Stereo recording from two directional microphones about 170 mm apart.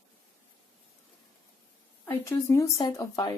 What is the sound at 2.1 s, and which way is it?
Speech, 15° left (ahead or behind).